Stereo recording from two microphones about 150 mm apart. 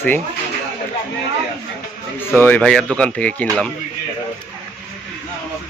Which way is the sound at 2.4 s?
10° left (ahead or behind).